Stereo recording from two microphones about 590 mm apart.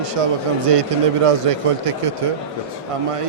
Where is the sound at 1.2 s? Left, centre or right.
Right.